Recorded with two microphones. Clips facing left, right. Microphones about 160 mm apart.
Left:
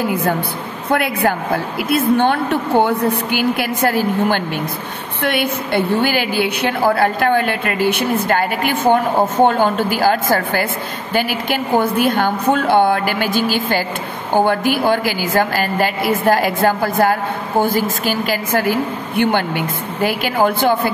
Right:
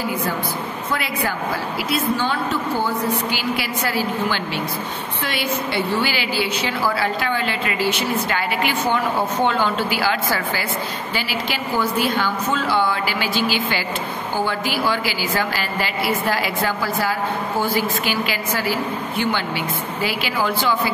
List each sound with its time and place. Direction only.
0.0 s a woman's voice: 55° left (ahead or behind)